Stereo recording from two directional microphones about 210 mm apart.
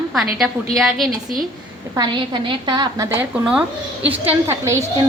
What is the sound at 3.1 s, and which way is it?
A woman's voice, 5° right (ahead or behind).